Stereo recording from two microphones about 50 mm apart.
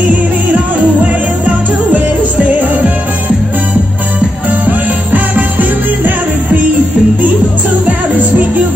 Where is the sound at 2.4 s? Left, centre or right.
Right.